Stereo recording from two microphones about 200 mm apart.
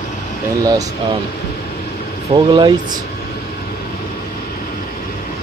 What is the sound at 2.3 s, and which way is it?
Speech, 20° right (ahead or behind).